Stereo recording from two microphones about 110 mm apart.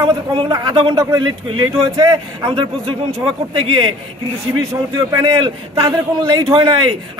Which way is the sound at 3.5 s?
55° right (ahead or behind).